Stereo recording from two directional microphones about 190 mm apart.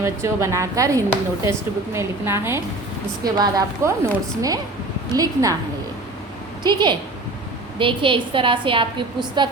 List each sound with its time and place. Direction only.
0.0 s a woman's voice: 15° right (ahead or behind)
6.6 s a woman's voice: 25° right (ahead or behind)